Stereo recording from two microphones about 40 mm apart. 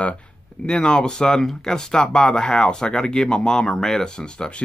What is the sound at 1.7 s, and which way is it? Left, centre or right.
Speech, centre.